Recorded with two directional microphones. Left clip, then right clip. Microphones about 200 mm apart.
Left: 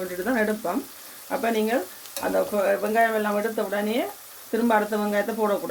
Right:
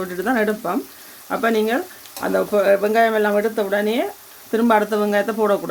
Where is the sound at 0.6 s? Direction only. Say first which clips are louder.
Right 4 dB; 45° right (ahead or behind).